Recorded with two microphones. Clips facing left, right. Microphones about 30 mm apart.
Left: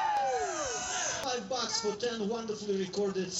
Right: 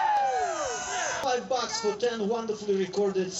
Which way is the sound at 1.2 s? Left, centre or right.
Centre.